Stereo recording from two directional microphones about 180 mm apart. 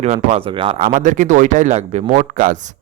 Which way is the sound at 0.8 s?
45° right (ahead or behind).